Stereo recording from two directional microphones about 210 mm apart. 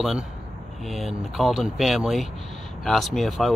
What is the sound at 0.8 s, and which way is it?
Speech, centre (ahead or behind).